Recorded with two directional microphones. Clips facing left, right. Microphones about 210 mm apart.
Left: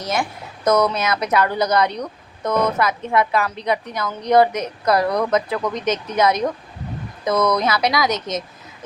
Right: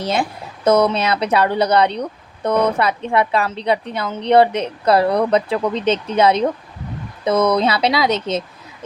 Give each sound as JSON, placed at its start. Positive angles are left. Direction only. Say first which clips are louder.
{"t": 0.0, "sound": "speech", "louder": "right 3 dB", "side_deg": -30}